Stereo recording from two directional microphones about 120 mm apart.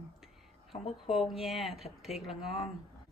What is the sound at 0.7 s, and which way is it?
Speech, 55° left (ahead or behind).